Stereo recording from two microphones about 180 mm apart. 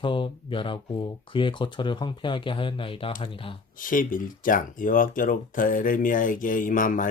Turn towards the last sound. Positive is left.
turn(degrees=50)  # may be behind; listen again after turning